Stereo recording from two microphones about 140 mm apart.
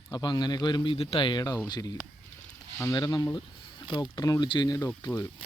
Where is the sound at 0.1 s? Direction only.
30° left (ahead or behind).